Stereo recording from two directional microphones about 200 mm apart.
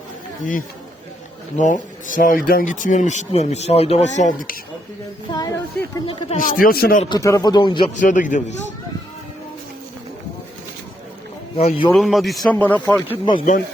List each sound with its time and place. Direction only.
1.5 s speech: 40° left (ahead or behind)
5.3 s a woman's voice: 15° left (ahead or behind)
6.2 s a man's voice: 40° left (ahead or behind)
7.0 s a woman's voice: 20° left (ahead or behind)
7.9 s speech: 40° left (ahead or behind)
11.5 s a woman's voice: 25° left (ahead or behind)
11.9 s speech: centre (ahead or behind)